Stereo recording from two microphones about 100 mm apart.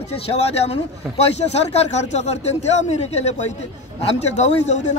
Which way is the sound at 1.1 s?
90° left.